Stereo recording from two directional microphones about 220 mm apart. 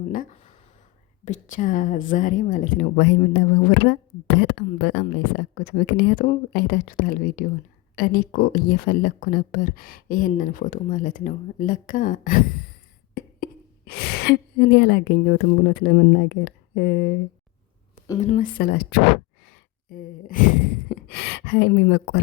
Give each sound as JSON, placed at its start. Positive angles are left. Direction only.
{"t": 0.1, "sound": "a sound", "side_deg": 35}
{"t": 1.2, "sound": "speech", "side_deg": 35}
{"t": 18.2, "sound": "speech", "side_deg": 35}
{"t": 20.9, "sound": "speech", "side_deg": 50}